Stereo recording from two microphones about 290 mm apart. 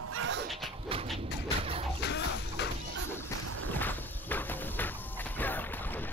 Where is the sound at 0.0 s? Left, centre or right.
Right.